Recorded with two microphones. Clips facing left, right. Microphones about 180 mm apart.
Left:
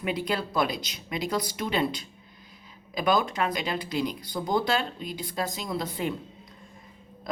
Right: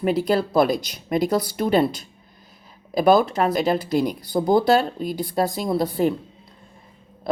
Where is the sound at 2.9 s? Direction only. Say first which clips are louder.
Right 8 dB; 35° right (ahead or behind).